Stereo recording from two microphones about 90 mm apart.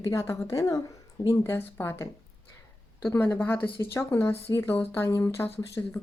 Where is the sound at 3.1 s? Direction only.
20° left (ahead or behind).